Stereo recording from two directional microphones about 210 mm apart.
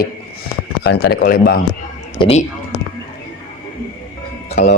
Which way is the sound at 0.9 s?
45° left (ahead or behind).